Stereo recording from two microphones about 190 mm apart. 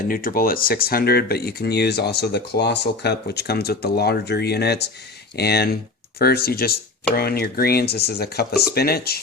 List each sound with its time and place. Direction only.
0.1 s speech: 50° left (ahead or behind)